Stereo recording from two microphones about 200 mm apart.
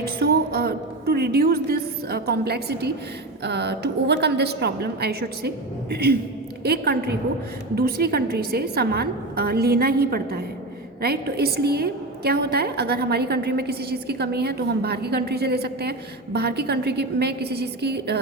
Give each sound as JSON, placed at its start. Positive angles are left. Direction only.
{"t": 0.0, "sound": "a woman's voice", "side_deg": -50}